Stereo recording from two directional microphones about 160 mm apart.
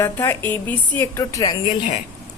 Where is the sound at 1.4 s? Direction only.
45° left (ahead or behind).